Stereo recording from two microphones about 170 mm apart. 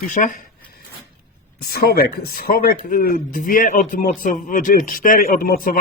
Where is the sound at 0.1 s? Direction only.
50° left (ahead or behind).